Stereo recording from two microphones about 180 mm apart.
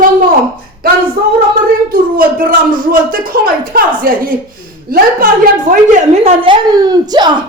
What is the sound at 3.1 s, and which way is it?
A woman's voice, 55° right (ahead or behind).